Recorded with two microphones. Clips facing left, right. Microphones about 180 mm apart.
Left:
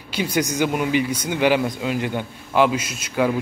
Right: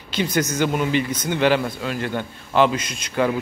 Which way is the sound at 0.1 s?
10° left (ahead or behind).